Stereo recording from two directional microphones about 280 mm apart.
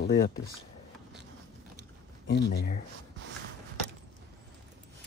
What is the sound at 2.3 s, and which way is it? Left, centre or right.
Speech, left.